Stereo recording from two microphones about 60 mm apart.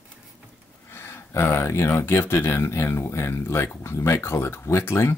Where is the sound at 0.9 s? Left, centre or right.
Left.